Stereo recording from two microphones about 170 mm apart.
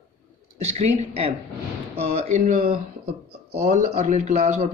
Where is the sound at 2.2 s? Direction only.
40° right (ahead or behind).